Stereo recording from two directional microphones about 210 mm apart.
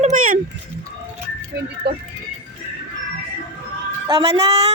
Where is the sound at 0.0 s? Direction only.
35° right (ahead or behind).